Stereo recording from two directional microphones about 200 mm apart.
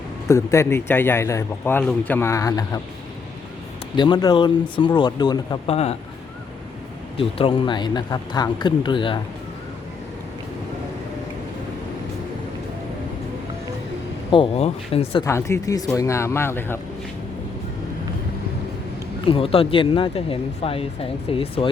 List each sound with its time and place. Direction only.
0.3 s a man's voice: 15° left (ahead or behind)
3.9 s speech: 20° left (ahead or behind)
7.2 s speech: 25° left (ahead or behind)
14.3 s speech: 30° left (ahead or behind)
15.2 s a man's voice: 15° left (ahead or behind)
19.3 s speech: 30° left (ahead or behind)